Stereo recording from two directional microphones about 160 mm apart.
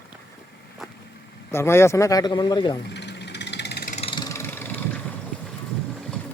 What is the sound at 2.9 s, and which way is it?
Vehicle, 90° left.